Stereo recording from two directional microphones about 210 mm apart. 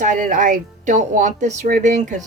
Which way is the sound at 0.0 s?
40° right (ahead or behind).